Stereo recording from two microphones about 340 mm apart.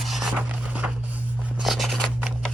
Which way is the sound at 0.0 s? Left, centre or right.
Centre.